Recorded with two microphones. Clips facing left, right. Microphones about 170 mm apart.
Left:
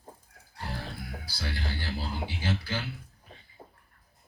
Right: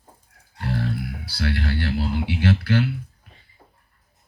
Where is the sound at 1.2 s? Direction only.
70° right (ahead or behind).